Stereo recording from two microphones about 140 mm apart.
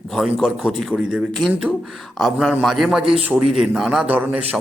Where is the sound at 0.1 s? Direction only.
Centre (ahead or behind).